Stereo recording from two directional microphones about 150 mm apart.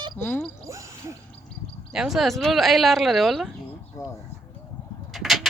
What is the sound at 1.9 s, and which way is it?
Speech, centre (ahead or behind).